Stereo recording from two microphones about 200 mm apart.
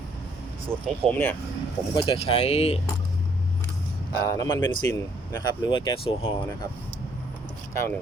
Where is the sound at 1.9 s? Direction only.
25° left (ahead or behind).